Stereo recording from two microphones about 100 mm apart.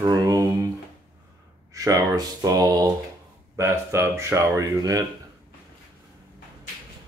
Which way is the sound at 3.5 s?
25° right (ahead or behind).